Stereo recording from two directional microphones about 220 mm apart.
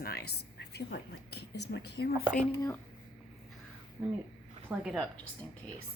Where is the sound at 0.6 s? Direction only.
50° left (ahead or behind).